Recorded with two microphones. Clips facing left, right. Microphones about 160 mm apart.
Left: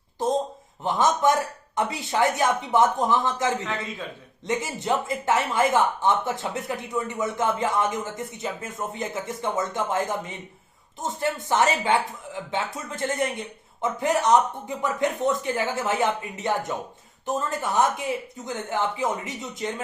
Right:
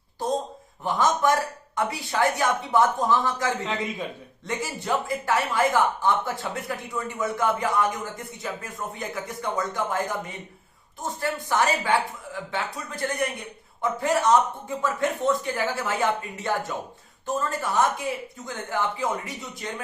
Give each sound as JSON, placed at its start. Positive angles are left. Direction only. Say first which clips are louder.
{"t": 0.9, "sound": "speech", "louder": "left 1 dB", "side_deg": 20}
{"t": 3.6, "sound": "a man's voice", "louder": "right 2 dB", "side_deg": -20}
{"t": 4.4, "sound": "speech", "louder": "left 3 dB", "side_deg": 20}